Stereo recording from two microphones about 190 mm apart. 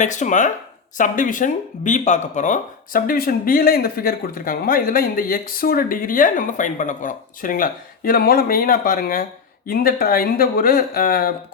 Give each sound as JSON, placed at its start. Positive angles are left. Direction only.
{"t": 0.0, "sound": "speech", "side_deg": 40}